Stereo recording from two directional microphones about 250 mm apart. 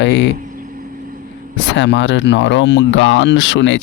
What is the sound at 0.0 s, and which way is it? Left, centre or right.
Speech, left.